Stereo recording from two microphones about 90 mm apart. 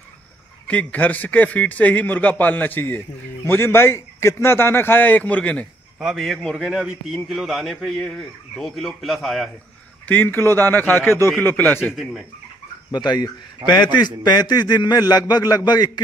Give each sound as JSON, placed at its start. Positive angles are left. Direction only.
{"t": 0.7, "sound": "a man's voice", "side_deg": 15}
{"t": 5.9, "sound": "speech", "side_deg": 0}
{"t": 10.0, "sound": "a man's voice", "side_deg": 20}
{"t": 11.8, "sound": "speech", "side_deg": 0}
{"t": 12.9, "sound": "a man's voice", "side_deg": 50}